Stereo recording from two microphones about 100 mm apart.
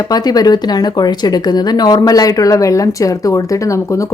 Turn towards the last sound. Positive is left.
turn(degrees=30)  # may be behind; listen again after turning